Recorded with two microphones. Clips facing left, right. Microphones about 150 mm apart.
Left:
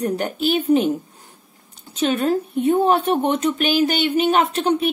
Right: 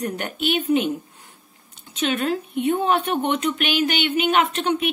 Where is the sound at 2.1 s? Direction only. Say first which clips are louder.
Left 4 dB; 40° left (ahead or behind).